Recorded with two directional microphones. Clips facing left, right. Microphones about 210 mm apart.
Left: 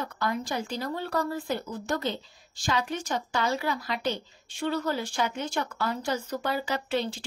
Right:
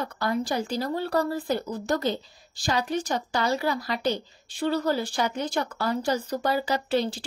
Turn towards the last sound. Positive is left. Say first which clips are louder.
# right 4 dB
turn(degrees=-35)  # may be behind; listen again after turning